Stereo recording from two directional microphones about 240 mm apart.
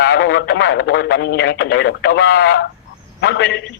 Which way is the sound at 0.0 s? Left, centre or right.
Left.